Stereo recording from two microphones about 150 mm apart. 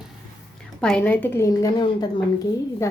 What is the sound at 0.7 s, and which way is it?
Speech, 10° left (ahead or behind).